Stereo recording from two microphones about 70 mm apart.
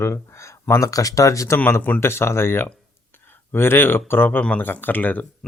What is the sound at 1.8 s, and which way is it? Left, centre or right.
Speech, left.